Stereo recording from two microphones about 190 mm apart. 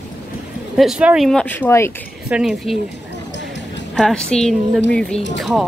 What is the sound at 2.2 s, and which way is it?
Speech, 5° right (ahead or behind).